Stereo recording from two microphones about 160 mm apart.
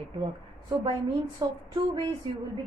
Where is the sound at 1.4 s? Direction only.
25° right (ahead or behind).